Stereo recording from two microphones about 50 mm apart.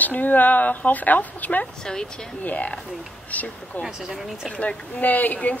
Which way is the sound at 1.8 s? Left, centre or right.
Centre.